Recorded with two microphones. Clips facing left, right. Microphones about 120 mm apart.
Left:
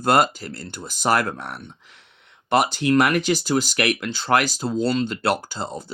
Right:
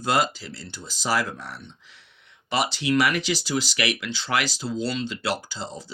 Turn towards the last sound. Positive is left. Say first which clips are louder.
# left 5 dB
turn(degrees=50)  # may be behind; listen again after turning